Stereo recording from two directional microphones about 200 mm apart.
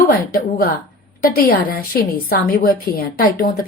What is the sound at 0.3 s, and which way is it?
A woman's voice, 45° left (ahead or behind).